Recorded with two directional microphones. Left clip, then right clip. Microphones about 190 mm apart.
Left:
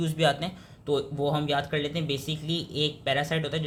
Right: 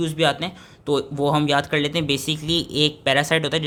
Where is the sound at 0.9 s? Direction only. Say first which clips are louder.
Right 6 dB; 35° right (ahead or behind).